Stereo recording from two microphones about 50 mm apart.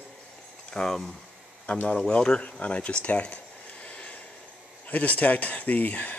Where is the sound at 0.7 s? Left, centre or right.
Centre.